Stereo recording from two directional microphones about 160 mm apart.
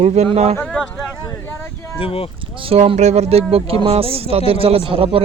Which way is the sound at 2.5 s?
35° right (ahead or behind).